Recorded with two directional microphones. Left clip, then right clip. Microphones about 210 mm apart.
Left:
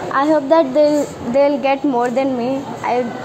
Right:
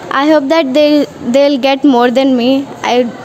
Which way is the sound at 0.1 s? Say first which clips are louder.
Right 4 dB; 45° right (ahead or behind).